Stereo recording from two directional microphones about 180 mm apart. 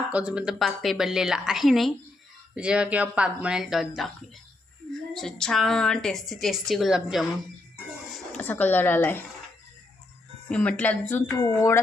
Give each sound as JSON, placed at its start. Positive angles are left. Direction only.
{"t": 0.1, "sound": "a woman's voice", "side_deg": -5}
{"t": 5.1, "sound": "a woman's voice", "side_deg": 0}
{"t": 10.5, "sound": "speech", "side_deg": 5}